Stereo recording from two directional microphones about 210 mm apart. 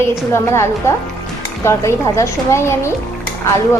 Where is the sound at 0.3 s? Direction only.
10° left (ahead or behind).